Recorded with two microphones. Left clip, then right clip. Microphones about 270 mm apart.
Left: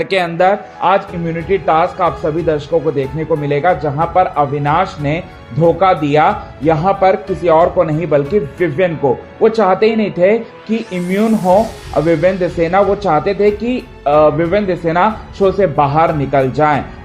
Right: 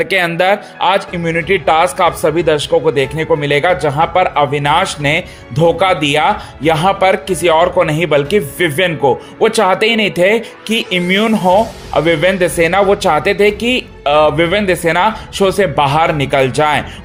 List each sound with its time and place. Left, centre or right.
0.0 s speech: right